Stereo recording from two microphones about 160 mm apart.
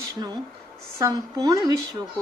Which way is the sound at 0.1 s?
25° right (ahead or behind).